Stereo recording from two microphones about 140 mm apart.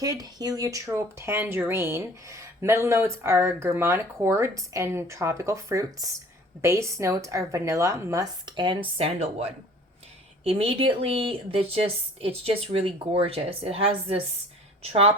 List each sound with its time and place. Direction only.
0.0 s a woman's voice: 25° right (ahead or behind); by 14.2 s 45° right (ahead or behind)